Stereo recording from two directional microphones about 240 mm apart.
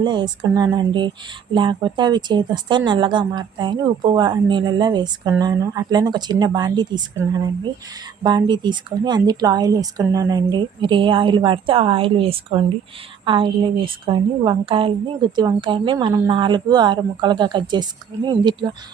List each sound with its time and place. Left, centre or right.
0.0 s speech: centre